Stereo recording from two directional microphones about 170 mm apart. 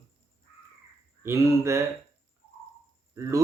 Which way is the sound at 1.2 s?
15° right (ahead or behind).